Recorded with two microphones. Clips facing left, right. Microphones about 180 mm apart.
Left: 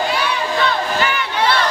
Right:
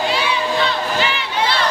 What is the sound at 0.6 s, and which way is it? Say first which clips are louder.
Battle cry: left 1 dB; 50° left (ahead or behind).